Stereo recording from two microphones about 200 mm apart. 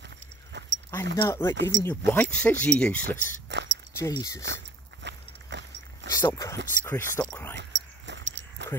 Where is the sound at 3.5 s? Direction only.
60° right (ahead or behind).